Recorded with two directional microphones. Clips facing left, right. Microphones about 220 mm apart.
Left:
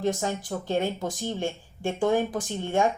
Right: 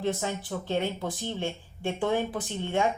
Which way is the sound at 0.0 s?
45° left (ahead or behind).